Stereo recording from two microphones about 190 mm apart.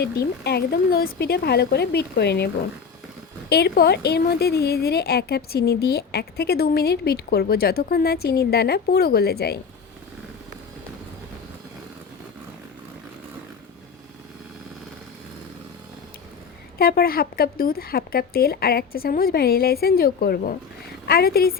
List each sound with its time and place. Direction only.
0.0 s a woman's voice: 60° left (ahead or behind)
3.5 s a woman's voice: 55° left (ahead or behind)
16.7 s speech: 55° left (ahead or behind)